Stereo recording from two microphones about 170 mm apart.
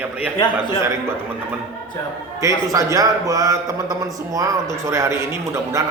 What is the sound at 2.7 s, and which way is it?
A man's voice, 20° right (ahead or behind).